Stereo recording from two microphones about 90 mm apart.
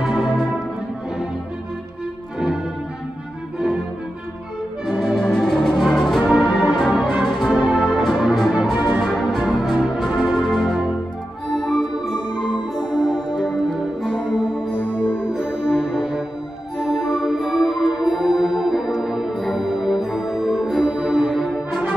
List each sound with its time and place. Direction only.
0.0 s music: 5° right (ahead or behind)
2.3 s music: 5° right (ahead or behind)
4.8 s music: 5° right (ahead or behind)
11.5 s music: 5° left (ahead or behind)
12.2 s music: 60° left (ahead or behind)
14.9 s music: 15° left (ahead or behind)
15.3 s music: 5° right (ahead or behind)